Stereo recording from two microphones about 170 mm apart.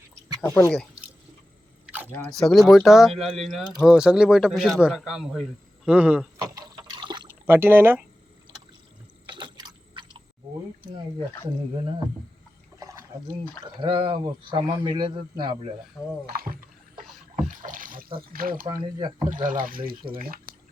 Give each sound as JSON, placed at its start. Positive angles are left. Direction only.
{"t": 0.5, "sound": "speech", "side_deg": 10}
{"t": 2.1, "sound": "a man's voice", "side_deg": 5}
{"t": 6.4, "sound": "a sound", "side_deg": -25}
{"t": 7.4, "sound": "speech", "side_deg": -10}
{"t": 9.2, "sound": "a sound", "side_deg": -30}
{"t": 12.8, "sound": "a sound", "side_deg": -20}
{"t": 13.7, "sound": "a man's voice", "side_deg": -30}
{"t": 16.2, "sound": "speech", "side_deg": -60}
{"t": 17.5, "sound": "water", "side_deg": -50}
{"t": 18.6, "sound": "a man's voice", "side_deg": -25}
{"t": 19.3, "sound": "speech", "side_deg": -50}